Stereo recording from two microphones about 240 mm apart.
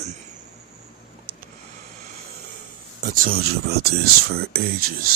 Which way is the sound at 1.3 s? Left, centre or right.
Right.